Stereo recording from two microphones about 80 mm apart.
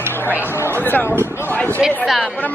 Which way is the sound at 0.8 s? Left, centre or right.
Left.